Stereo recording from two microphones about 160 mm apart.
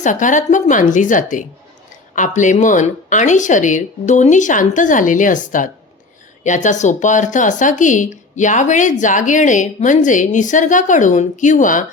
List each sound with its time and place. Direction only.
0.0 s speech: 50° left (ahead or behind)